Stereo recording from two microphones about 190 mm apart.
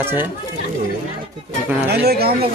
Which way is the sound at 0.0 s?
10° right (ahead or behind).